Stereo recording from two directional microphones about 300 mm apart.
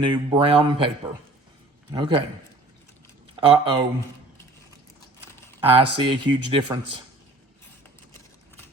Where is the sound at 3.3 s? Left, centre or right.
Centre.